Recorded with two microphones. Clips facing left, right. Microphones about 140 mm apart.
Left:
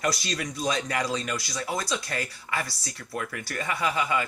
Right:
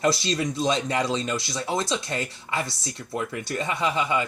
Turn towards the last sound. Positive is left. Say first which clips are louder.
# right 2 dB
turn(degrees=-25)  # may be behind; listen again after turning